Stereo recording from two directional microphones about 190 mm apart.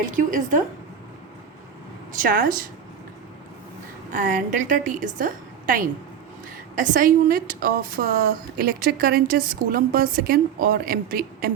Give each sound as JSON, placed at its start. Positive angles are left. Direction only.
{"t": 0.0, "sound": "a woman's voice", "side_deg": -45}
{"t": 2.1, "sound": "a woman's voice", "side_deg": -50}
{"t": 4.1, "sound": "a woman's voice", "side_deg": -40}